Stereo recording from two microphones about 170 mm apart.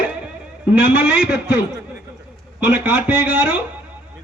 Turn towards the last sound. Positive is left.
turn(degrees=-10)  # may be behind; listen again after turning